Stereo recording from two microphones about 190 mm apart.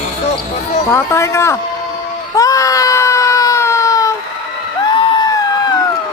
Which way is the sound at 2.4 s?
15° left (ahead or behind).